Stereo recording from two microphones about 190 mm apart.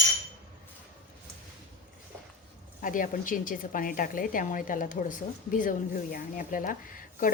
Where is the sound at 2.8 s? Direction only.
45° left (ahead or behind).